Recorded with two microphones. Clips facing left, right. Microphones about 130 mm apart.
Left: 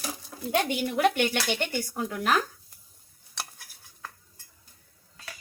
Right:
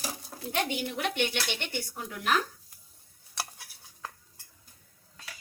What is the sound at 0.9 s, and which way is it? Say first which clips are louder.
Speech: left 10 dB; 55° left (ahead or behind).